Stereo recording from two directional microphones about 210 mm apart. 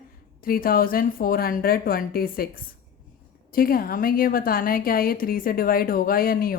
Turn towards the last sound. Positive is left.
turn(degrees=45)  # may be behind; listen again after turning